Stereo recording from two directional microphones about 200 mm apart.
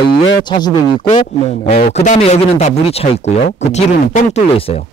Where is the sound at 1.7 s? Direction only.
45° left (ahead or behind).